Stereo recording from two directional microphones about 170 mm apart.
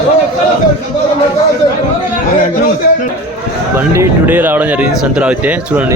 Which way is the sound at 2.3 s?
45° left (ahead or behind).